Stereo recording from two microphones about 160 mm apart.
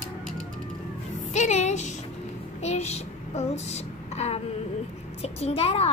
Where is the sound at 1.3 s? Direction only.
50° left (ahead or behind).